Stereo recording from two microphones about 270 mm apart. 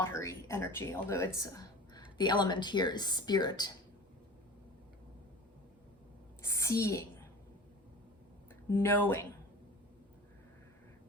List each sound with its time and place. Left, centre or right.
0.0 s a woman's voice: centre
6.4 s a woman's voice: centre
8.7 s speech: centre